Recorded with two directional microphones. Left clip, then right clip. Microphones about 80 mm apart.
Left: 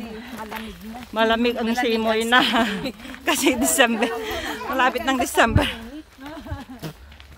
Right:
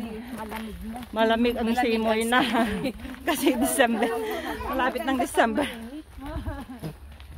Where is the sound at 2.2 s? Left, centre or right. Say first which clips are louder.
Left 5 dB; left.